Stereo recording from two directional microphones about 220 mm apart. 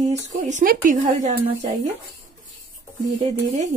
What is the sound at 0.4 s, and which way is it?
A woman's voice, 35° right (ahead or behind).